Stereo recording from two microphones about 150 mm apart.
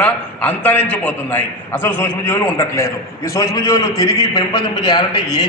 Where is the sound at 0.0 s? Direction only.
10° left (ahead or behind).